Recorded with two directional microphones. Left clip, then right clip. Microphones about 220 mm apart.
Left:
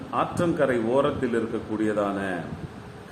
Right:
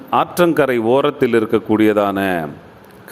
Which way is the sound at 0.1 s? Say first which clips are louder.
Right 11 dB; 45° right (ahead or behind).